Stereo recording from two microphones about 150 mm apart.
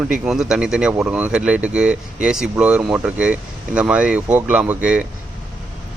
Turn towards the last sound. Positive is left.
turn(degrees=-10)  # may be behind; listen again after turning